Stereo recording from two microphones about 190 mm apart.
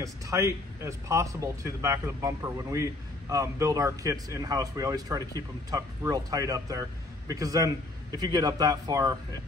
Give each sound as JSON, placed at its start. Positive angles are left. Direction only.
{"t": 0.0, "sound": "speech", "side_deg": -15}